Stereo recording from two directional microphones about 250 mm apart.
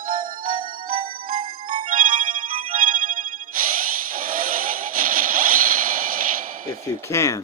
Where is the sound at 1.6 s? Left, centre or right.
Right.